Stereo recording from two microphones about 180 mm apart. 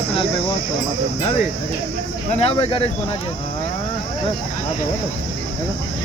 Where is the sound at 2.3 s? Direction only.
35° left (ahead or behind).